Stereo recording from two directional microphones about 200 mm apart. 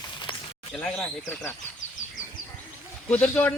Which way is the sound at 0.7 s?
5° left (ahead or behind).